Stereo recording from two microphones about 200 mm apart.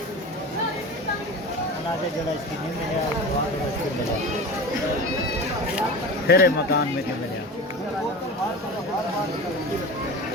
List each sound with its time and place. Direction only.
6.2 s speech: 50° left (ahead or behind)